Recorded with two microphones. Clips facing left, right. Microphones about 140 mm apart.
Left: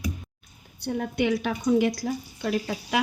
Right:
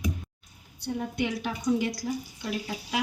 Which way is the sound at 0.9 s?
65° left (ahead or behind).